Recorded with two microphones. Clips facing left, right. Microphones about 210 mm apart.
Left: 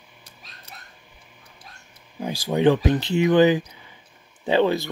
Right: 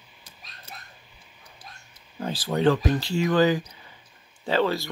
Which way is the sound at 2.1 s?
10° left (ahead or behind).